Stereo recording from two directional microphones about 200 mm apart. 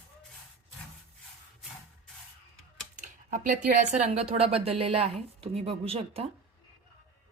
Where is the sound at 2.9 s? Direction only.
40° right (ahead or behind).